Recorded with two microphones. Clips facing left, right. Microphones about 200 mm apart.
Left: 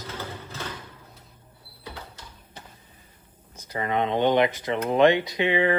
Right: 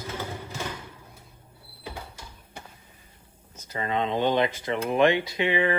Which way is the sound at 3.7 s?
20° left (ahead or behind).